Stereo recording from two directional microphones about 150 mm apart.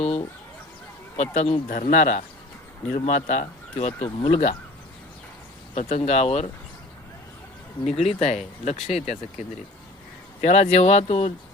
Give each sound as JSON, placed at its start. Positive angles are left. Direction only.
{"t": 0.0, "sound": "a sound", "side_deg": 45}
{"t": 1.1, "sound": "speech", "side_deg": 50}
{"t": 5.7, "sound": "speech", "side_deg": 45}
{"t": 7.9, "sound": "speech", "side_deg": 45}
{"t": 10.4, "sound": "speech", "side_deg": 50}